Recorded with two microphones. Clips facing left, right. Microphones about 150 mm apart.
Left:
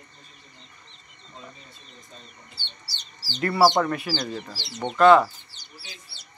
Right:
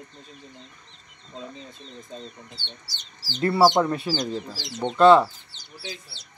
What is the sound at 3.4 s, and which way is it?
Speech, 20° right (ahead or behind).